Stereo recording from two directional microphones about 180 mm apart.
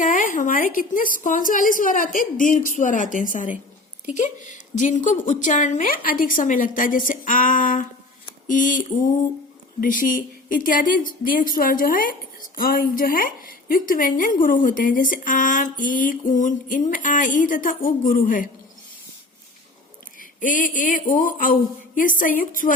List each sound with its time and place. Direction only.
0.0 s a woman's voice: 45° left (ahead or behind)
20.1 s a woman's voice: 45° left (ahead or behind)